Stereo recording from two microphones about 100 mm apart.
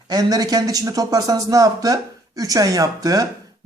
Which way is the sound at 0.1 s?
40° right (ahead or behind).